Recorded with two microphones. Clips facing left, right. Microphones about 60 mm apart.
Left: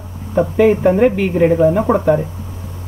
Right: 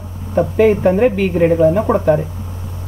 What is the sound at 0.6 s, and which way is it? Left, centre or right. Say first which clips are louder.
Speech: even; centre.